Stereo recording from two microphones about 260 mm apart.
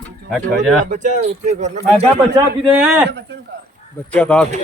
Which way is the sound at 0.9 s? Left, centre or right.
Right.